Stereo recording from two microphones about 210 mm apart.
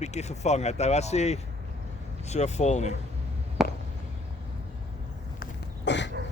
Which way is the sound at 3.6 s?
Centre (ahead or behind).